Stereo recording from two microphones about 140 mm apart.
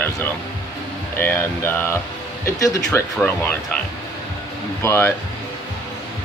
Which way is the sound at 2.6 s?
25° left (ahead or behind).